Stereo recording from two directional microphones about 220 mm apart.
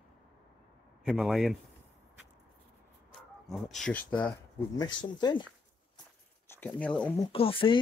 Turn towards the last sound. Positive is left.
turn(degrees=25)  # may be behind; listen again after turning